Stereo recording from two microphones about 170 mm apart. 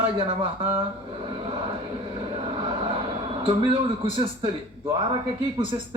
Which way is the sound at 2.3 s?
30° right (ahead or behind).